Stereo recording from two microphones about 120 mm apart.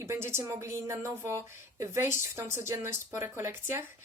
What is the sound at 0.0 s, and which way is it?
A woman's voice, 20° right (ahead or behind).